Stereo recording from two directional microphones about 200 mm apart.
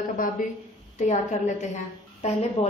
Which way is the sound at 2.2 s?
35° left (ahead or behind).